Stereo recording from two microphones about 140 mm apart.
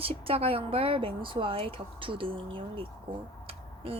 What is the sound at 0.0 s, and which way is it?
A woman's voice, 45° right (ahead or behind).